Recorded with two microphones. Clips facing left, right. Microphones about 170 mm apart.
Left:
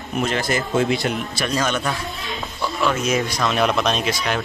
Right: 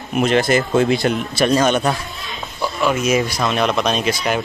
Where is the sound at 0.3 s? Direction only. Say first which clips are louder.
Right 9 dB; 70° right (ahead or behind).